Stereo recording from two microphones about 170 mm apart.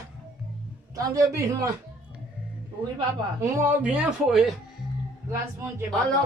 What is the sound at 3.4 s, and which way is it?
Speech, 15° right (ahead or behind).